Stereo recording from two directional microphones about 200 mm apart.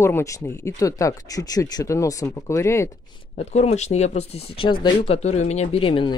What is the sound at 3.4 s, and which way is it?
Speech, 35° left (ahead or behind).